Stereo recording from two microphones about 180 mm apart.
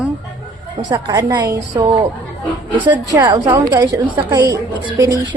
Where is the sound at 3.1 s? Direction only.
25° right (ahead or behind).